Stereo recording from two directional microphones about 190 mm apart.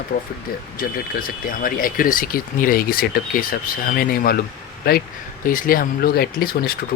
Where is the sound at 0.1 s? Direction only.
65° left (ahead or behind).